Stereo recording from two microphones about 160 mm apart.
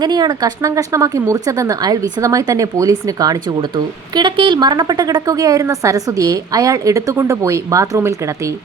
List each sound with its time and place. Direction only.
0.0 s a woman's voice: 25° right (ahead or behind)